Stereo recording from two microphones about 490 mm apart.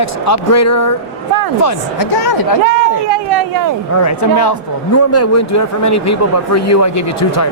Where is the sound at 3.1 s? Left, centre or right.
Right.